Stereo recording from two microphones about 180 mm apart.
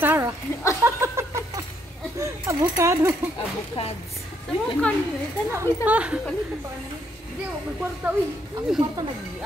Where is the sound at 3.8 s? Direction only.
30° left (ahead or behind).